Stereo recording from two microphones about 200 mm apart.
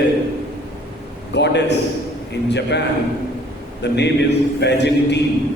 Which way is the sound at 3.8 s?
60° left (ahead or behind).